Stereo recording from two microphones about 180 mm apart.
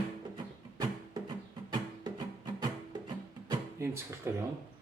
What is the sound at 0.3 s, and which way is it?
Music, 20° right (ahead or behind).